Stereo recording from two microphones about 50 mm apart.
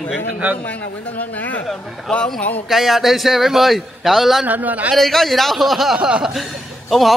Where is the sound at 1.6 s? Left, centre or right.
Centre.